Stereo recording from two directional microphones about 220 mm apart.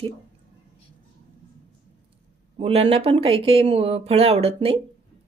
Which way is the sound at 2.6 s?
25° right (ahead or behind).